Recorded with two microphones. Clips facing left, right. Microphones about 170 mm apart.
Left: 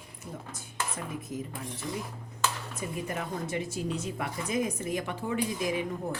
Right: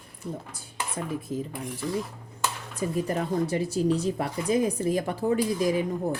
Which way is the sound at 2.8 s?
35° right (ahead or behind).